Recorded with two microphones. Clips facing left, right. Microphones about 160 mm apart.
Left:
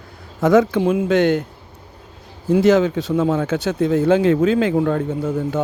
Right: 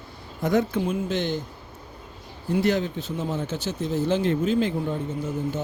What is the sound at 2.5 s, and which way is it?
Speech, 90° left.